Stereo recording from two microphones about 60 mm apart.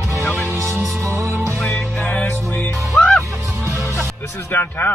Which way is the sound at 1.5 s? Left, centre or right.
Centre.